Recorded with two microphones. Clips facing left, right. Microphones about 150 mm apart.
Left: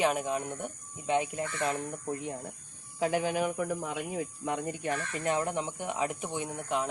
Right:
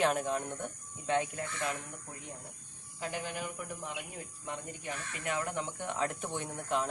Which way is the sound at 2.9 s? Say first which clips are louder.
Left 10 dB; 90° left.